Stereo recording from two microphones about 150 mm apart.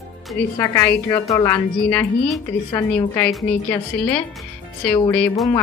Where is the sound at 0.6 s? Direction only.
15° left (ahead or behind).